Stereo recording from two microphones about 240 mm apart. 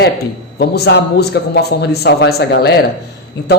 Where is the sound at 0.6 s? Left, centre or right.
Left.